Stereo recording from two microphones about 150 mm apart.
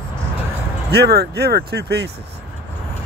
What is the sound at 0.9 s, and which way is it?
Speech, 90° right.